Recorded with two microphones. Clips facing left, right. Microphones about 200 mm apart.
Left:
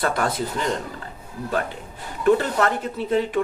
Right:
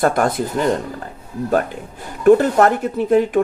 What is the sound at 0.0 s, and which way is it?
Speech, 50° right (ahead or behind).